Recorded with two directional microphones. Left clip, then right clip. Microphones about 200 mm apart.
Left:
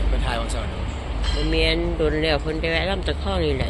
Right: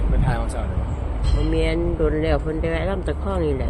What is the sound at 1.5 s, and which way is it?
Speech, 25° right (ahead or behind).